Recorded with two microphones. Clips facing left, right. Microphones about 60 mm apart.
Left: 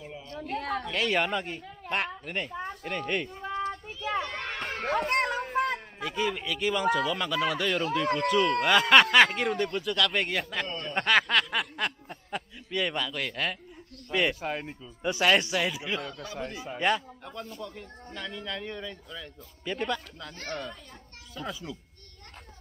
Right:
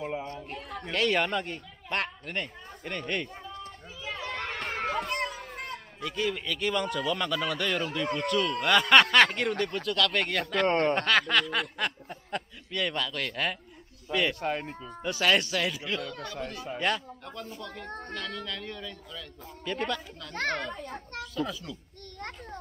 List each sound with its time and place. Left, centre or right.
0.0 s a sound: right
0.6 s a sound: left
0.8 s speech: centre
3.4 s children playing: left
4.3 s a sound: centre
5.1 s children playing: left
6.0 s speech: centre
10.7 s speech: right
11.0 s speech: centre
15.0 s speech: centre
20.3 s a child's voice: right
21.4 s speech: centre